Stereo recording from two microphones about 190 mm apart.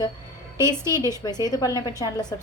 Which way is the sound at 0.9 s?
15° right (ahead or behind).